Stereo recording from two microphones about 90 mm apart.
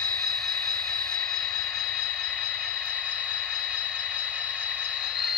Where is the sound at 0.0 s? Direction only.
10° left (ahead or behind).